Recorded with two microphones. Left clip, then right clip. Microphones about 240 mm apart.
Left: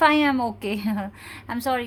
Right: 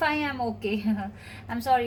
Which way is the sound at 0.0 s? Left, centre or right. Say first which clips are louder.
Left 8 dB; left.